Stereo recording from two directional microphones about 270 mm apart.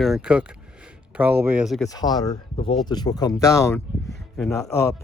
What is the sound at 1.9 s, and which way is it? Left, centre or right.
Speech, centre.